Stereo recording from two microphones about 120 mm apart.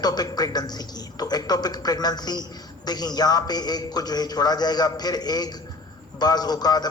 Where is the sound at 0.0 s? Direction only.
35° left (ahead or behind).